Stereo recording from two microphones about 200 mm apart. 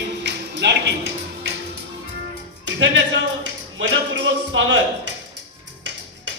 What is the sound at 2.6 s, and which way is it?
A man's voice, 65° right (ahead or behind).